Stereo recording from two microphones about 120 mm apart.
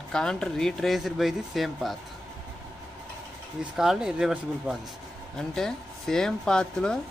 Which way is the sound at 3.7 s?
5° right (ahead or behind).